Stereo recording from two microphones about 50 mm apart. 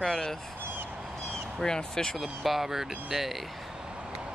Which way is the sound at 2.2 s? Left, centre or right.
Centre.